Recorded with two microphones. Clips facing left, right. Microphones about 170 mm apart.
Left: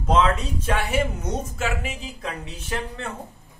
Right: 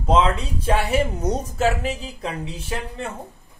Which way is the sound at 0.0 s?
30° right (ahead or behind).